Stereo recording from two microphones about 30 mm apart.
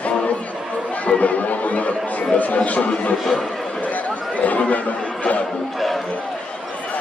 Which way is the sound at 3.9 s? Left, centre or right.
Left.